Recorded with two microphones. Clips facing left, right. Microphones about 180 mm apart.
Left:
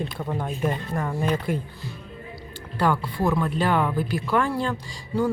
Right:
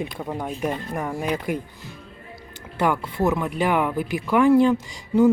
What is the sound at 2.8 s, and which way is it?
Speech, 20° right (ahead or behind).